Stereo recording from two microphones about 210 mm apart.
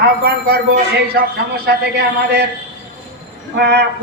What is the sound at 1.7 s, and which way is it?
Speech, 55° right (ahead or behind).